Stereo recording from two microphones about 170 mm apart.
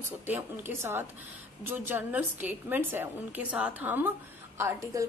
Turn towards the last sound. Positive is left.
turn(degrees=-15)  # may be behind; listen again after turning